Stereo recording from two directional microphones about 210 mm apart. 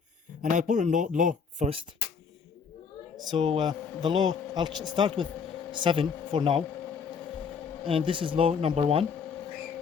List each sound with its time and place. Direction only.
0.4 s speech: 40° right (ahead or behind)
3.2 s a man's voice: 20° right (ahead or behind)
7.9 s a man's voice: 25° right (ahead or behind)